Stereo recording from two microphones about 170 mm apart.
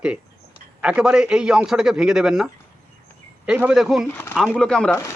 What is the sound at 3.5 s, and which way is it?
A man's voice, 5° right (ahead or behind).